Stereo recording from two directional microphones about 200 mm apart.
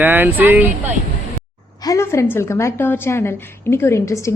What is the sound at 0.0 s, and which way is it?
Speech, 10° right (ahead or behind).